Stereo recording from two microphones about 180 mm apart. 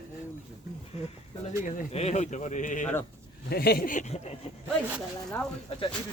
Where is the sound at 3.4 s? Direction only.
60° left (ahead or behind).